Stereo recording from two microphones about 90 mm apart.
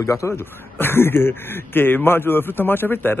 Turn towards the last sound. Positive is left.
turn(degrees=25)  # may be behind; listen again after turning